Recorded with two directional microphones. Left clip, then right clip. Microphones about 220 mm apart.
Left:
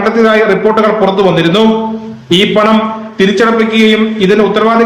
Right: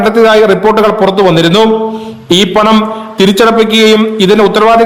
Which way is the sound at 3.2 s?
50° right (ahead or behind).